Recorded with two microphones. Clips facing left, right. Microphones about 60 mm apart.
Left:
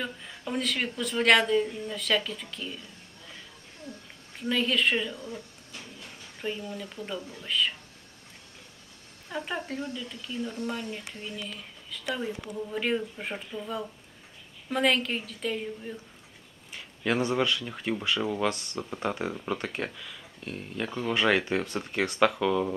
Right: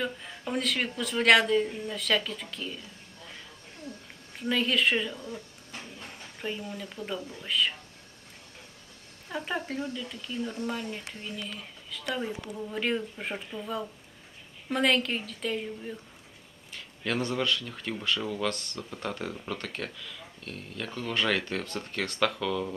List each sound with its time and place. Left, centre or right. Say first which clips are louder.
0.0 s speech: right 2 dB; centre
4.4 s speech: even; centre
5.7 s a sound: right 2 dB; right
6.4 s speech: left 1 dB; centre
9.3 s speech: right 1 dB; centre
16.7 s speech: left 3 dB; centre